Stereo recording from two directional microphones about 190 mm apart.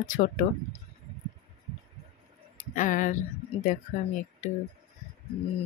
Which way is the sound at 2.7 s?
45° left (ahead or behind).